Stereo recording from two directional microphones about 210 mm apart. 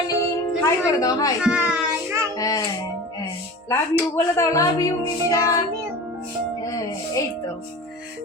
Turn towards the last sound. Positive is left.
turn(degrees=15)  # may be behind; listen again after turning